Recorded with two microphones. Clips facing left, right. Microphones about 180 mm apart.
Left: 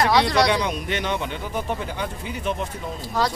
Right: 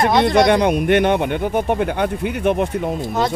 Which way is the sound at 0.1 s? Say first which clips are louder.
Right 5 dB; 50° right (ahead or behind).